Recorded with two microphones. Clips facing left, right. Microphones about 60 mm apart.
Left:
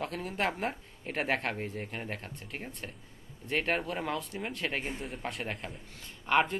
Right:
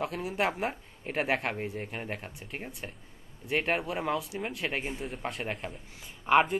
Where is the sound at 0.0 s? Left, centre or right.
Centre.